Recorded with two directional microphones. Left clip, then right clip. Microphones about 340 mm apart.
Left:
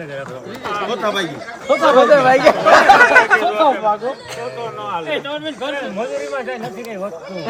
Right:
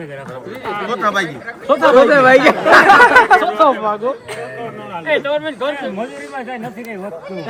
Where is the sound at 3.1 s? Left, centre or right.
Centre.